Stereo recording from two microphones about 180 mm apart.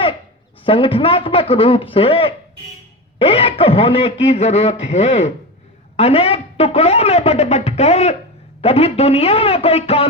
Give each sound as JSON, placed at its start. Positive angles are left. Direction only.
{"t": 0.6, "sound": "speech", "side_deg": 30}